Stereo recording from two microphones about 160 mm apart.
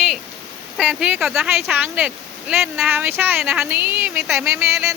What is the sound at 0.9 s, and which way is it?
Speech, 10° right (ahead or behind).